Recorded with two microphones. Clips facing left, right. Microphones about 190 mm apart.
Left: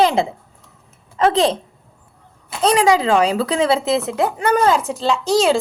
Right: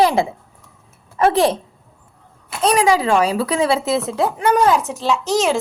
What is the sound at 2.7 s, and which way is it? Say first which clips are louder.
A woman's voice: left 1 dB; 25° left (ahead or behind).